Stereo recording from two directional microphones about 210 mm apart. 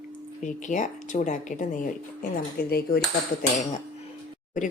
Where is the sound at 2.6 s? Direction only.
45° left (ahead or behind).